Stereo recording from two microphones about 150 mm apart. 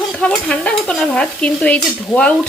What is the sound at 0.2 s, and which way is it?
Stir, 5° left (ahead or behind).